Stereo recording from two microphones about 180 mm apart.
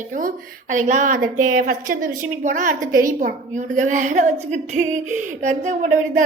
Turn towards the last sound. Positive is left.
turn(degrees=-40)  # may be behind; listen again after turning